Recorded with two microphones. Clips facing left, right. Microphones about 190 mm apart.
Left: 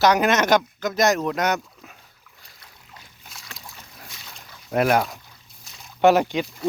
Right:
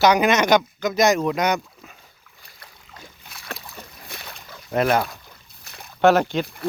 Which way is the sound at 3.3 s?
60° right (ahead or behind).